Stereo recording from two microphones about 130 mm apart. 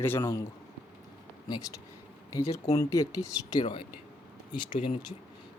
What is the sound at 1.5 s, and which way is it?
Speech, 25° left (ahead or behind).